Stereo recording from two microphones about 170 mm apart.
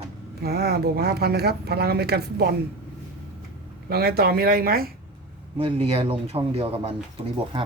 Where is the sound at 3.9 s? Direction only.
65° right (ahead or behind).